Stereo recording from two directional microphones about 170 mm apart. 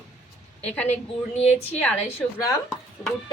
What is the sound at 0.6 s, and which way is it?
A woman's voice, 10° left (ahead or behind).